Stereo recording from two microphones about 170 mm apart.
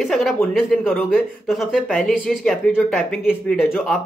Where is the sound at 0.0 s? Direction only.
Centre (ahead or behind).